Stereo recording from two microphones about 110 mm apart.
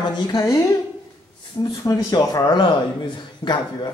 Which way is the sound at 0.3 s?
35° left (ahead or behind).